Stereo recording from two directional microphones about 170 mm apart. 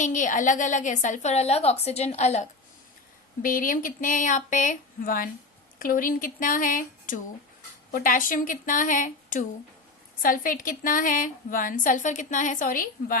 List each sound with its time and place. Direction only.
0.0 s a woman's voice: 50° left (ahead or behind)
3.4 s a woman's voice: 55° left (ahead or behind)